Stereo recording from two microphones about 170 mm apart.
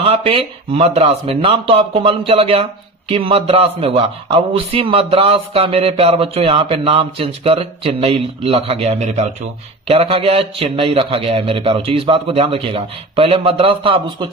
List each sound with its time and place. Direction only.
0.0 s speech: 35° right (ahead or behind)